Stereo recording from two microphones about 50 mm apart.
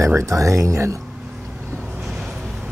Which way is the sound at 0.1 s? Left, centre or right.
Right.